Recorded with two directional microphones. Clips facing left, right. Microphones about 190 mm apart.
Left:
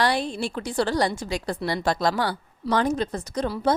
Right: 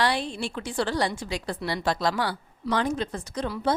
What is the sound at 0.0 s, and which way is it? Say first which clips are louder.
A woman's voice: left 2 dB; 40° left (ahead or behind).